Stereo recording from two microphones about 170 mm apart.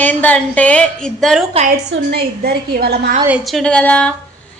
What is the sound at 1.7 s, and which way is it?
A woman's voice, 65° right (ahead or behind).